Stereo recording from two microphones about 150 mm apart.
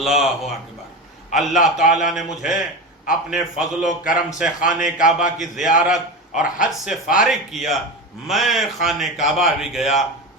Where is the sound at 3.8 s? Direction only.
60° left (ahead or behind).